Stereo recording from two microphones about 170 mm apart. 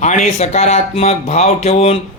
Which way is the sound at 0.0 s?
45° left (ahead or behind).